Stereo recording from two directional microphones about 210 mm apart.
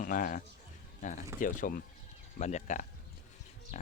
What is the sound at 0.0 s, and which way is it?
Speech, 40° left (ahead or behind).